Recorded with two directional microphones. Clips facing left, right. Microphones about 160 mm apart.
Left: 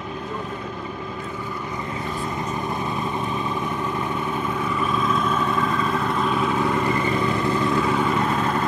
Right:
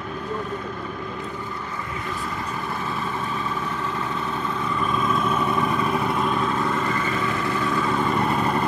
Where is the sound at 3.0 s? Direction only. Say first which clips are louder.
Left 2 dB; 20° left (ahead or behind).